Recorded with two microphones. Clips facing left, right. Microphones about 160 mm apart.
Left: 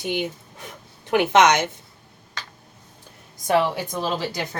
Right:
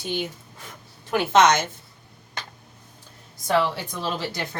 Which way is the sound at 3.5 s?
15° left (ahead or behind).